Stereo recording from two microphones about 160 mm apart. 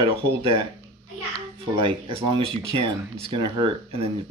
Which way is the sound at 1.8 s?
35° right (ahead or behind).